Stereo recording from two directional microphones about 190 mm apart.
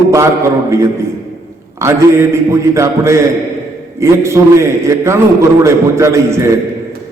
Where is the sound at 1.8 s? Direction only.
15° right (ahead or behind).